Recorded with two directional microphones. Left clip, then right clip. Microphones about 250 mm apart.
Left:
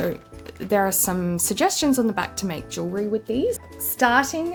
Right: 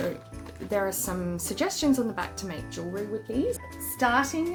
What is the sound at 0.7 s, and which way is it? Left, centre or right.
A woman's voice, left.